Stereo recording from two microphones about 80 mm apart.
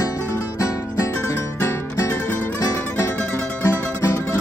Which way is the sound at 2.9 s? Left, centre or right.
Left.